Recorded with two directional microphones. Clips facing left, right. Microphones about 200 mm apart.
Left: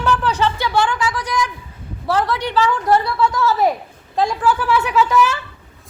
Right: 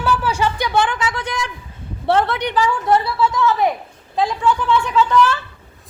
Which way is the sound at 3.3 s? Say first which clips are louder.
Even; centre (ahead or behind).